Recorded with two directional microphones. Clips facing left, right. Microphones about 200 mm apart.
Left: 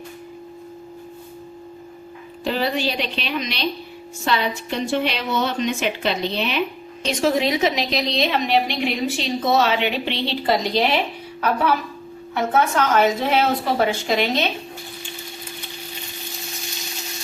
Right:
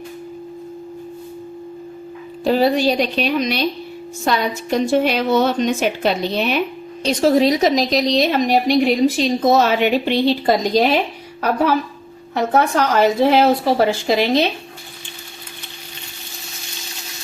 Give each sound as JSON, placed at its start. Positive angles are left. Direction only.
{"t": 2.4, "sound": "a woman's voice", "side_deg": -40}